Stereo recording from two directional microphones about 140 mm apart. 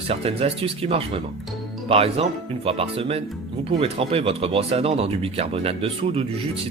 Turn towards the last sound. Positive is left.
turn(degrees=-45)  # may be behind; listen again after turning